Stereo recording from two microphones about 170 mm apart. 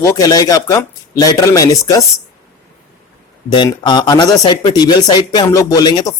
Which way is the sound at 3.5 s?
25° left (ahead or behind).